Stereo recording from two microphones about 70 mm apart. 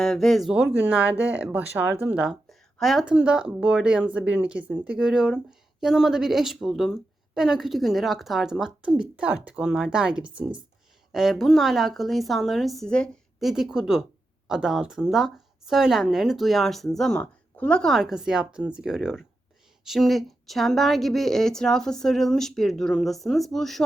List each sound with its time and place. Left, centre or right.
0.0 s speech: centre
0.5 s speech: centre
2.5 s a sound: centre
3.0 s speech: centre
11.1 s speech: centre
17.2 s a woman's voice: centre
17.9 s speech: centre